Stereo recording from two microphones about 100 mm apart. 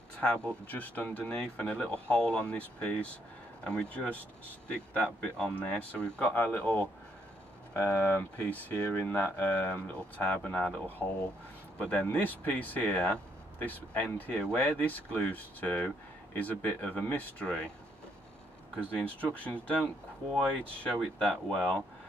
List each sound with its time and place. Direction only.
0.2 s speech: 10° left (ahead or behind)
19.2 s speech: 15° left (ahead or behind)
20.9 s speech: 5° left (ahead or behind)